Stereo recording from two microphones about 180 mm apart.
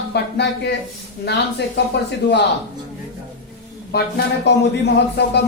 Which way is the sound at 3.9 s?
65° left (ahead or behind).